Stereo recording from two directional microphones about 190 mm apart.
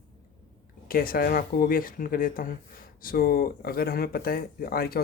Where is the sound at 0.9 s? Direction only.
50° left (ahead or behind).